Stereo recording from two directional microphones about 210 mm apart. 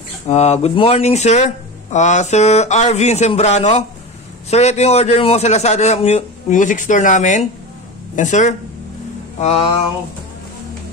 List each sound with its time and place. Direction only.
0.3 s speech: 30° left (ahead or behind)